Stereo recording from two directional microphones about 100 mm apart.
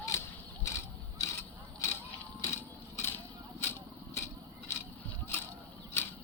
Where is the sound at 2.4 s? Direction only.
25° left (ahead or behind).